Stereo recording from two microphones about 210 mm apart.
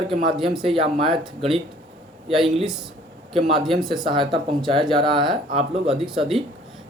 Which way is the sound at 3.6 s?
Centre (ahead or behind).